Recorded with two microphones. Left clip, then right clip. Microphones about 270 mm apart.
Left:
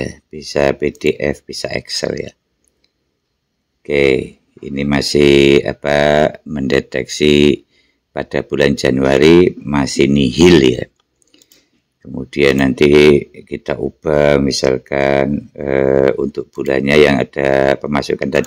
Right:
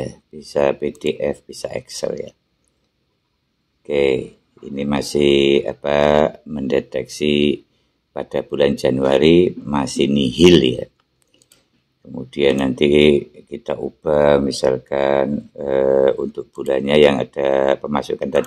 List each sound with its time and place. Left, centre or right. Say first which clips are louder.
0.0 s speech: left 4 dB; left
3.8 s speech: left 4 dB; left
12.0 s speech: left 4 dB; left